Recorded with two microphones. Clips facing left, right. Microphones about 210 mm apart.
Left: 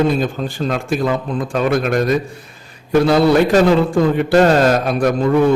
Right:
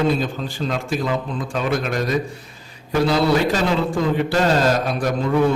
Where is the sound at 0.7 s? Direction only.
55° left (ahead or behind).